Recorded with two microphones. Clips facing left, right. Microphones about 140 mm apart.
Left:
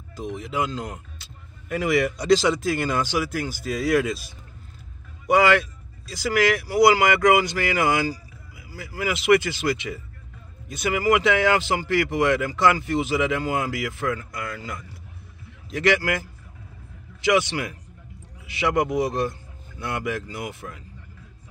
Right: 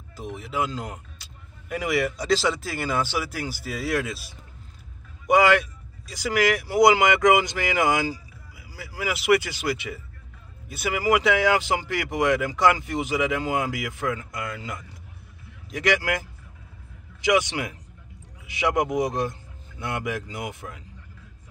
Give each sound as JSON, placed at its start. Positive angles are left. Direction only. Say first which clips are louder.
{"t": 0.1, "sound": "speech", "louder": "left 2 dB", "side_deg": -5}
{"t": 5.2, "sound": "speech", "louder": "even", "side_deg": -15}
{"t": 15.7, "sound": "speech", "louder": "left 2 dB", "side_deg": -10}